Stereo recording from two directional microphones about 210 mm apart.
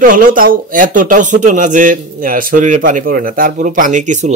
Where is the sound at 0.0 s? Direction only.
40° right (ahead or behind).